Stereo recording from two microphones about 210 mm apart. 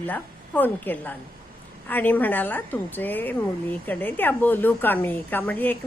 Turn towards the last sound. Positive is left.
turn(degrees=10)  # may be behind; listen again after turning